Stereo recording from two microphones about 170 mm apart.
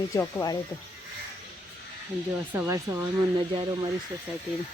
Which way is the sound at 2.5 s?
15° right (ahead or behind).